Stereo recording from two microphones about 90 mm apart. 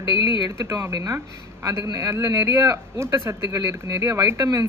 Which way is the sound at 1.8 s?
40° right (ahead or behind).